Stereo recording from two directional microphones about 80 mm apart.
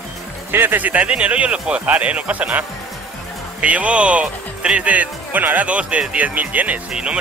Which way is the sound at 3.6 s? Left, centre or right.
Centre.